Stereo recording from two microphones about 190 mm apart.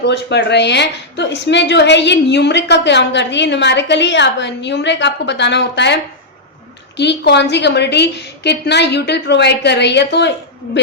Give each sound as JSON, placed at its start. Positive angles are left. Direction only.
{"t": 0.0, "sound": "a woman's voice", "side_deg": 60}